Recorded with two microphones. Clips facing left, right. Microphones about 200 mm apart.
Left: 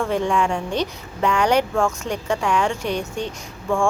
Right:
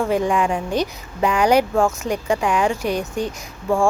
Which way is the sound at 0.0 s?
5° right (ahead or behind).